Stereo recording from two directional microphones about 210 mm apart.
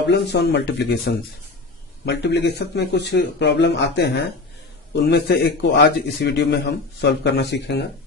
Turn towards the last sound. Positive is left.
turn(degrees=55)  # may be behind; listen again after turning